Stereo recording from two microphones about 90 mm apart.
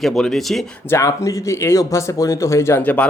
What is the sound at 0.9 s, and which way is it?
Speech, 35° left (ahead or behind).